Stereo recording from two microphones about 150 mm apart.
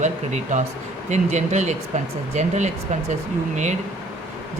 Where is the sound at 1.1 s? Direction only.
50° right (ahead or behind).